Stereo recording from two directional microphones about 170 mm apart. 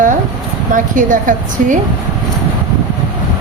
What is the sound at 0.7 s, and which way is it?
A woman's voice, 50° right (ahead or behind).